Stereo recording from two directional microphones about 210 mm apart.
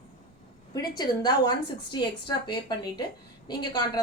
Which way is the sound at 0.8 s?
20° left (ahead or behind).